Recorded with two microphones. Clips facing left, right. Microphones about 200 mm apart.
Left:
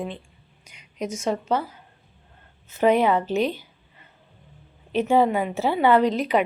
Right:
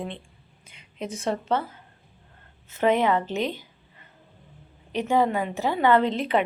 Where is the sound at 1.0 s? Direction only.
30° right (ahead or behind).